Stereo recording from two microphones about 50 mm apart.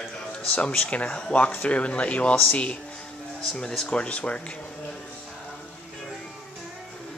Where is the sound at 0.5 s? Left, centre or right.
Left.